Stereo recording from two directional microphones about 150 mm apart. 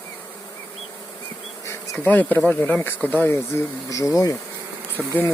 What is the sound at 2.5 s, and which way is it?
Speech, 10° left (ahead or behind).